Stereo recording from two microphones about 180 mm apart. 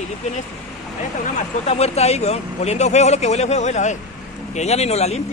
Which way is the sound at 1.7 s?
35° left (ahead or behind).